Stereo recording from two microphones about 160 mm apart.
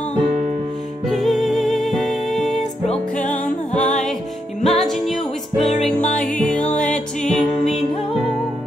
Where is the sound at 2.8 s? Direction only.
50° left (ahead or behind).